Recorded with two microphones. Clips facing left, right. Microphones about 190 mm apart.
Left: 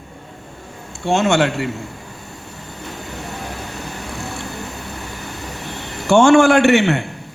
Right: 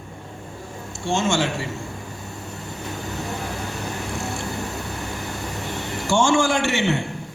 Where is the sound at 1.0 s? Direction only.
65° left (ahead or behind).